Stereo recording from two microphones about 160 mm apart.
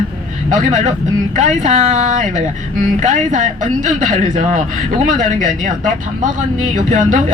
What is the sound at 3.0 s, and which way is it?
A woman's voice, 50° right (ahead or behind).